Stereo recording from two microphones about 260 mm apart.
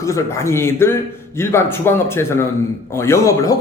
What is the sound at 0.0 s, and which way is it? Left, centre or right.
Speech, centre.